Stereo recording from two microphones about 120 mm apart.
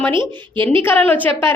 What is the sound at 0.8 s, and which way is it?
Speech, 15° left (ahead or behind).